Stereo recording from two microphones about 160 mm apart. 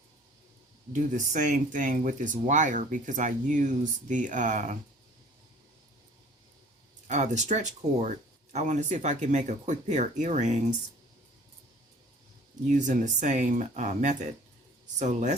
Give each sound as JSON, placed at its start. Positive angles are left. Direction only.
{"t": 0.9, "sound": "speech", "side_deg": -50}
{"t": 7.1, "sound": "speech", "side_deg": -50}
{"t": 12.6, "sound": "speech", "side_deg": -50}